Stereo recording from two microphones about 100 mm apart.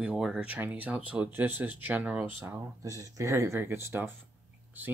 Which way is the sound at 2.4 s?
30° right (ahead or behind).